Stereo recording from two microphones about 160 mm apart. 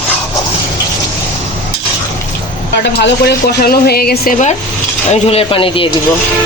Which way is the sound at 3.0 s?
85° left.